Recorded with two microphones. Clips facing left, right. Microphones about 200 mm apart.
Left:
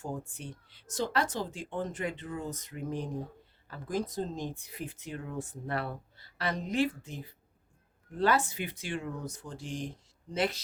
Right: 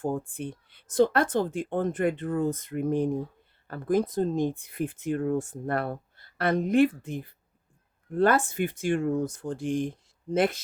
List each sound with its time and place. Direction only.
0.0 s speech: 55° right (ahead or behind)